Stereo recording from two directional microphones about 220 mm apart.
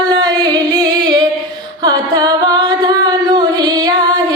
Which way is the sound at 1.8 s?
20° right (ahead or behind).